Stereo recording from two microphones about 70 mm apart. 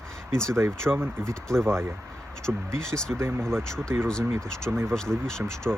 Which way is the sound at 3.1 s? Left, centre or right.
Right.